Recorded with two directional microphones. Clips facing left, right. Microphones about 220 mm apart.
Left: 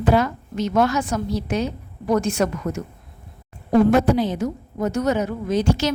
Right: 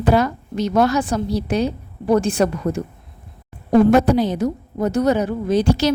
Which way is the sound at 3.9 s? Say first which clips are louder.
Right 3 dB; 40° right (ahead or behind).